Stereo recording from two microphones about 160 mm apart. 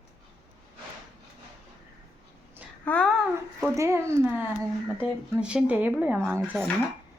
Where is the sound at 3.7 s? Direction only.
15° right (ahead or behind).